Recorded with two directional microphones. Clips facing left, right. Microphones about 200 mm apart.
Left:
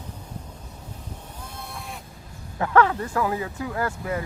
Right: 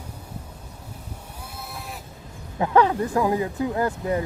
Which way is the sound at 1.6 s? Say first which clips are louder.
Right 1 dB; centre (ahead or behind).